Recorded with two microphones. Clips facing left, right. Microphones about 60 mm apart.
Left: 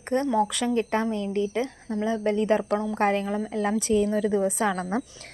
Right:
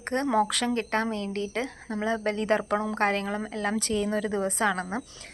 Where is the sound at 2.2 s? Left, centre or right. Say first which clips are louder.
Left 4 dB; right.